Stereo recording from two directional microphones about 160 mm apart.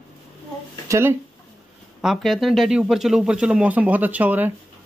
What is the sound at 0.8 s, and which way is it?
Speech, 15° right (ahead or behind).